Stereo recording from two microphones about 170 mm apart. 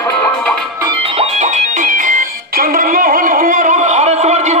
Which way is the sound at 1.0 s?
35° right (ahead or behind).